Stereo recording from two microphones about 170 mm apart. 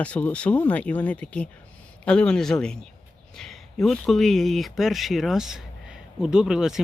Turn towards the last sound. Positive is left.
turn(degrees=-5)  # may be behind; listen again after turning